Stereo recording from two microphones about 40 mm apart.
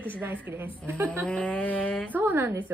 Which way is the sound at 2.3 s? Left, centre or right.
Right.